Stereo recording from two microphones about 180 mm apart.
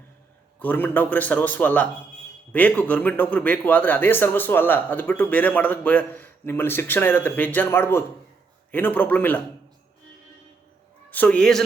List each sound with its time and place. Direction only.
0.6 s a man's voice: 10° left (ahead or behind)
11.1 s a man's voice: 10° left (ahead or behind)